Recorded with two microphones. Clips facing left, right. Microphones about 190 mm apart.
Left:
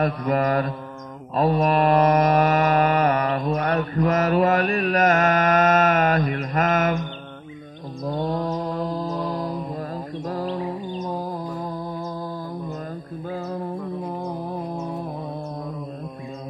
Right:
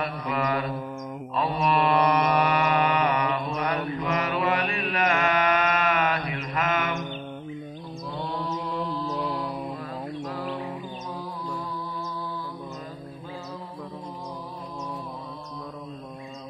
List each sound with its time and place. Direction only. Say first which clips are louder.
0.0 s mantra: left 7 dB; 45° left (ahead or behind)
8.0 s mantra: left 8 dB; 45° left (ahead or behind)
10.2 s music: left 8 dB; 40° left (ahead or behind)